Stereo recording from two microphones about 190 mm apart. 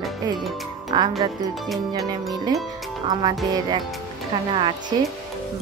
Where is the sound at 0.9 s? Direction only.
25° right (ahead or behind).